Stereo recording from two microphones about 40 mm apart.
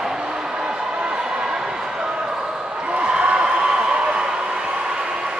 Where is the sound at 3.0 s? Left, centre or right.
Right.